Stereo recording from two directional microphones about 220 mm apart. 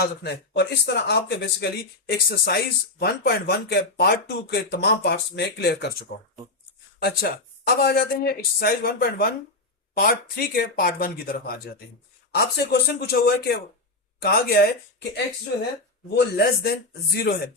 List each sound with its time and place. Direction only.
0.0 s speech: 50° left (ahead or behind)
16.0 s speech: 50° left (ahead or behind)